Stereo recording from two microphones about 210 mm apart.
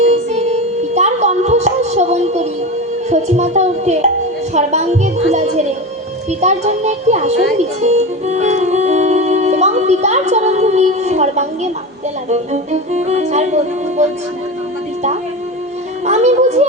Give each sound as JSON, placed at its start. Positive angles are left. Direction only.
{"t": 0.1, "sound": "music", "side_deg": -35}
{"t": 4.5, "sound": "speech", "side_deg": -35}
{"t": 16.0, "sound": "a child's voice", "side_deg": -35}